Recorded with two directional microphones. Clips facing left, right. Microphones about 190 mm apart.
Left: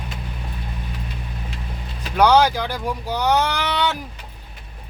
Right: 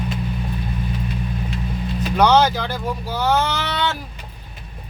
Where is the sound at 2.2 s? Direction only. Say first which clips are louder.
Even; 10° left (ahead or behind).